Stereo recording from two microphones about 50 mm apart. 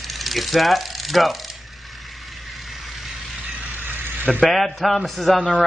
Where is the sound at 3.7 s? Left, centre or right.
Right.